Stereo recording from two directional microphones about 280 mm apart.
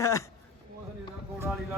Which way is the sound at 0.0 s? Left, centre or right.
Centre.